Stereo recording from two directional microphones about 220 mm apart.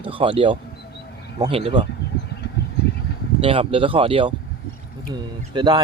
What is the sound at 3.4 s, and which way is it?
Speech, 25° right (ahead or behind).